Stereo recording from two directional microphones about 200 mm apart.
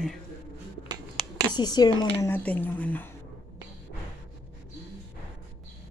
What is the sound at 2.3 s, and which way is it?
Speech, 10° left (ahead or behind).